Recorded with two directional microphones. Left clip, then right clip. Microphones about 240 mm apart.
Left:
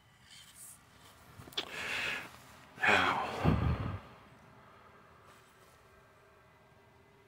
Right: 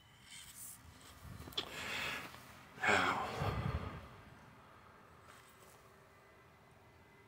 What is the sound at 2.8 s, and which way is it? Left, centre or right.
Gasp, centre.